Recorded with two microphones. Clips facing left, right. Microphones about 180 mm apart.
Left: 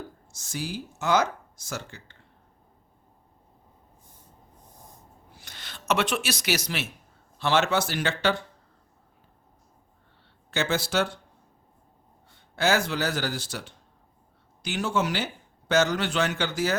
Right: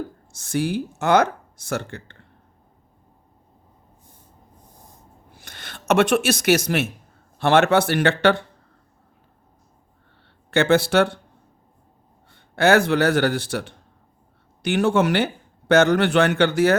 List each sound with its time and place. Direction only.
0.3 s a man's voice: 60° right (ahead or behind)
5.4 s a sound: 55° right (ahead or behind)
5.9 s a man's voice: 50° right (ahead or behind)
10.5 s a man's voice: 60° right (ahead or behind)
12.3 s a man's voice: 60° right (ahead or behind)